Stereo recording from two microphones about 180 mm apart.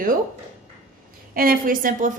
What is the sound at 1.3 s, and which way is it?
Speech, 55° right (ahead or behind).